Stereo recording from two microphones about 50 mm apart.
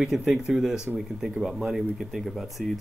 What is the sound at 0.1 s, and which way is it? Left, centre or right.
Speech, centre.